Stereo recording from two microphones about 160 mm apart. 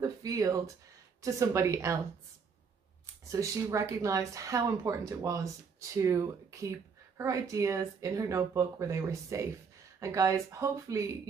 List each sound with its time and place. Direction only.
0.0 s a sound: 20° right (ahead or behind)
1.2 s speech: 20° right (ahead or behind)
3.3 s speech: 20° right (ahead or behind)